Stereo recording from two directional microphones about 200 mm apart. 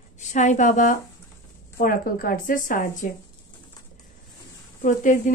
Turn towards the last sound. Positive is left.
turn(degrees=40)  # may be behind; listen again after turning